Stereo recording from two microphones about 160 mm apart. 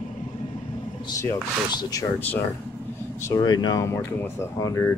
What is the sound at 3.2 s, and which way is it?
Speech, 25° left (ahead or behind).